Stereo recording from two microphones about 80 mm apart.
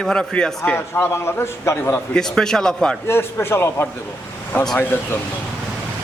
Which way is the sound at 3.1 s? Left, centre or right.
Left.